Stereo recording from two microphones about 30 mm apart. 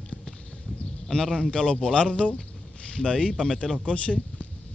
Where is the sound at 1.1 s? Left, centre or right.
Left.